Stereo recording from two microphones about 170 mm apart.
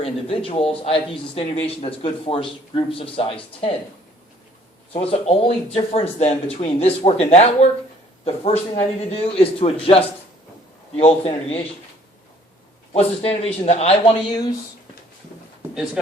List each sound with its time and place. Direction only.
0.0 s speech: 35° left (ahead or behind)
4.9 s speech: 35° left (ahead or behind)
12.9 s speech: 35° left (ahead or behind)